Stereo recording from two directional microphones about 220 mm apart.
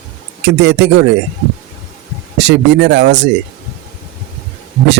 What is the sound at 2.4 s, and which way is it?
Speech, 55° right (ahead or behind).